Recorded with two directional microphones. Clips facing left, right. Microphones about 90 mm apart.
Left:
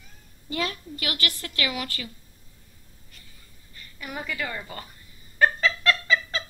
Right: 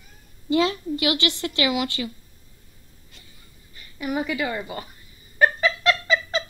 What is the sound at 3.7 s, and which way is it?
A woman's voice, 15° right (ahead or behind).